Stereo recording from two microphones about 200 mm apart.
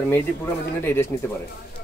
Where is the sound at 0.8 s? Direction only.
10° left (ahead or behind).